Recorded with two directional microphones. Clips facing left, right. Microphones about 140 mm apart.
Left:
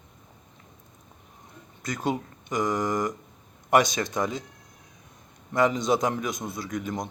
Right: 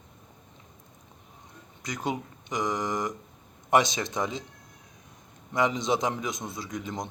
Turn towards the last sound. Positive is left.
turn(degrees=-20)  # may be behind; listen again after turning